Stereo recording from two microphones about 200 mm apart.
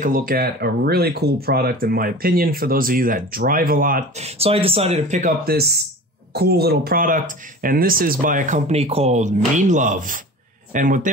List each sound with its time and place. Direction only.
0.0 s speech: 45° right (ahead or behind)
4.2 s speech: 30° right (ahead or behind)